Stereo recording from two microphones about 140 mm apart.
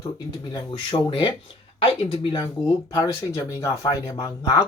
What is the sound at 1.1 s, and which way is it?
Speech, 40° left (ahead or behind).